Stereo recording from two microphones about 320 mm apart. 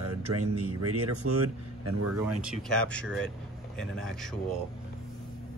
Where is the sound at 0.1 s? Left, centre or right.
Right.